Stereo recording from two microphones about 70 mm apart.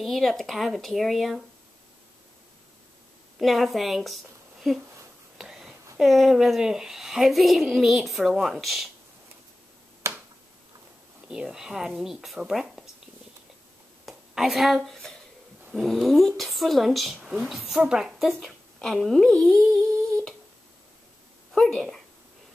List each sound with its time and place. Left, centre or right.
0.0 s a child's voice: centre
3.3 s a woman's voice: centre
5.4 s a sound: centre
5.9 s a child's voice: centre
10.0 s finger snapping: right
11.2 s a child's voice: centre
14.0 s a sound: centre
15.7 s a child's voice: centre
21.5 s a sound: centre